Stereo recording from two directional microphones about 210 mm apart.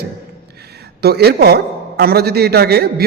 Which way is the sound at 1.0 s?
50° right (ahead or behind).